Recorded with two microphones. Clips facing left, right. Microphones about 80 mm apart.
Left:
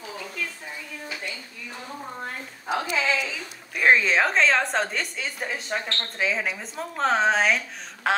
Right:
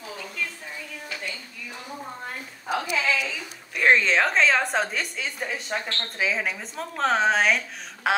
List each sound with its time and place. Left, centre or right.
2.9 s speech: left
3.3 s a woman's voice: centre